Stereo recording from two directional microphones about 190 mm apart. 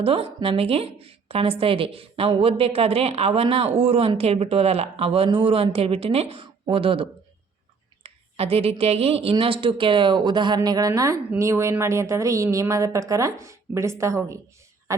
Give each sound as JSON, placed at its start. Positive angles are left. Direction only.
{"t": 0.0, "sound": "a woman's voice", "side_deg": -30}